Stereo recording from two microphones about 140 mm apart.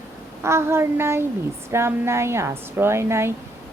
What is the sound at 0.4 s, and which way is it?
A woman's voice, 20° right (ahead or behind).